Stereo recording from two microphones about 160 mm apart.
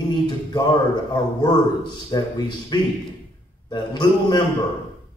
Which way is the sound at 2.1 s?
25° left (ahead or behind).